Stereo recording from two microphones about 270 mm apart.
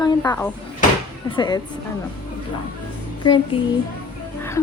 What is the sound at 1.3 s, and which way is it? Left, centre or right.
Speech, centre.